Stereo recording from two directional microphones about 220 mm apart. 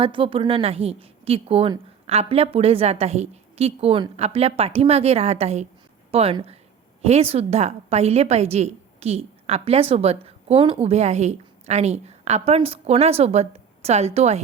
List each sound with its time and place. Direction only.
0.0 s a woman's voice: 25° right (ahead or behind)